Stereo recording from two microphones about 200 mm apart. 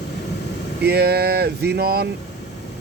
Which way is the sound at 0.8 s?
55° right (ahead or behind).